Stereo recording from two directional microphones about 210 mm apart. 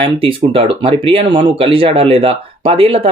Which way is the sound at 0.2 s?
25° right (ahead or behind).